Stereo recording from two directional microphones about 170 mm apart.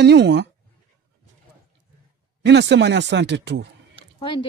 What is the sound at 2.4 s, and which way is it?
Speech, 90° right.